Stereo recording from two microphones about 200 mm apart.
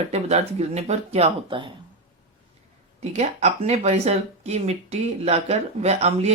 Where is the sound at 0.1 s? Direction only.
35° right (ahead or behind).